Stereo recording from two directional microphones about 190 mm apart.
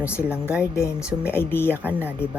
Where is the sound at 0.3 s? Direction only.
5° right (ahead or behind).